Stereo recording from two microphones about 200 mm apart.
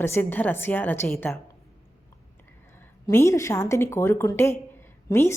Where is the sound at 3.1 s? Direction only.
15° left (ahead or behind).